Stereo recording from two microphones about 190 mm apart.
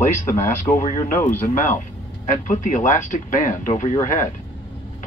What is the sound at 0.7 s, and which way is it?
A man's voice, 40° left (ahead or behind).